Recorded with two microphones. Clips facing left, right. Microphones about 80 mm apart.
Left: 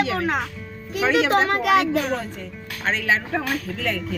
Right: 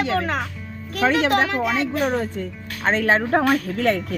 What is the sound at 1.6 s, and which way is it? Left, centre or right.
Speech, left.